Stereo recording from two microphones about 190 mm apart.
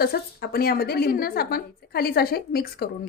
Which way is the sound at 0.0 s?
55° left (ahead or behind).